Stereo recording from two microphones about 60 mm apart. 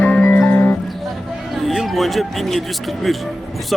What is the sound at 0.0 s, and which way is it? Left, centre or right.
Music, left.